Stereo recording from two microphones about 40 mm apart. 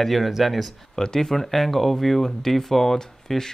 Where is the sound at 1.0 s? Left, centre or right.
Centre.